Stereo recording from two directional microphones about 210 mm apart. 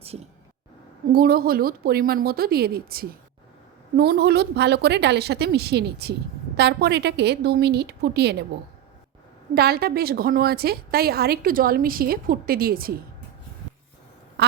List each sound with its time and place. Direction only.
1.1 s a woman's voice: 45° right (ahead or behind)
9.6 s a woman's voice: 45° right (ahead or behind)
14.4 s quack: 55° right (ahead or behind)